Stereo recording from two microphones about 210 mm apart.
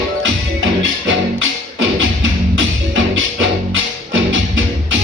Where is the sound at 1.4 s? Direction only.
65° right (ahead or behind).